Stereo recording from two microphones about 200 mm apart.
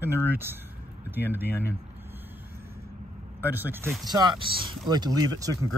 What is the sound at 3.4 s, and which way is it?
Speech, 10° right (ahead or behind).